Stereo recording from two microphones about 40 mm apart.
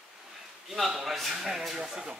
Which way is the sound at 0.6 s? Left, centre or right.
Centre.